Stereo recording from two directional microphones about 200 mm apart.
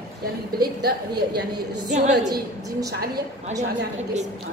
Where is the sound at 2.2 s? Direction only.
20° right (ahead or behind).